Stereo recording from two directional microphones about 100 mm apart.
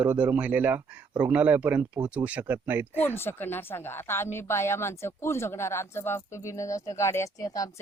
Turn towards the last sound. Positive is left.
turn(degrees=35)  # may be behind; listen again after turning